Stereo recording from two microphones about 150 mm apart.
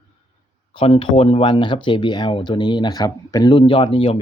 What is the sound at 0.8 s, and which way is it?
Speech, 40° left (ahead or behind).